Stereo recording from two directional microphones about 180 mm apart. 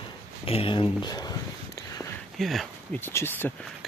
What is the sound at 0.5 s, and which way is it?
Speech, 30° left (ahead or behind).